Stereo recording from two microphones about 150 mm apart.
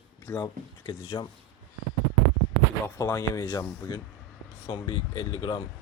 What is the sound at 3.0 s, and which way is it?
Speech, 20° left (ahead or behind).